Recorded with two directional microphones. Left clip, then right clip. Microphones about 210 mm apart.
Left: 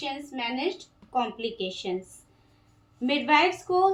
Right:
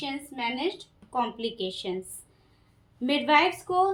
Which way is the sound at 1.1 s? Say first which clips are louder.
Left 1 dB; 25° right (ahead or behind).